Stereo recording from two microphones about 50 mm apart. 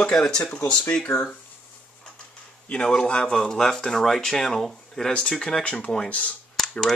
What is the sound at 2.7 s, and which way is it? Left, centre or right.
Speech, centre.